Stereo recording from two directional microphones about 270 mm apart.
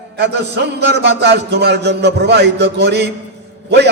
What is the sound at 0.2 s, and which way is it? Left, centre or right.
A man's voice, right.